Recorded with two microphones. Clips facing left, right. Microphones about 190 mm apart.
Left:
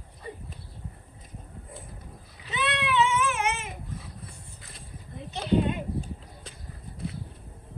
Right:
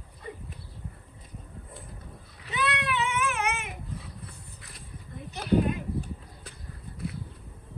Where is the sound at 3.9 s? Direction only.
60° right (ahead or behind).